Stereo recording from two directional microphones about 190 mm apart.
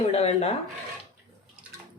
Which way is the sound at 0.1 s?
35° left (ahead or behind).